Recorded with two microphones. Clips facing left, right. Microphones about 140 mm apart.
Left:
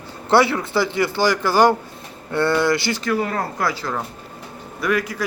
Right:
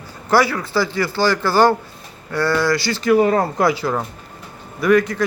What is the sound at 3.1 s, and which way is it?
Speech, 20° right (ahead or behind).